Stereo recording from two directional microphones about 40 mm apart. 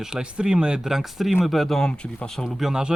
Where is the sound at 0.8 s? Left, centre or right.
Centre.